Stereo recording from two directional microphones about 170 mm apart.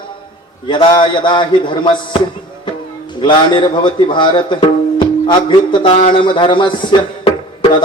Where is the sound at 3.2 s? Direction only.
30° left (ahead or behind).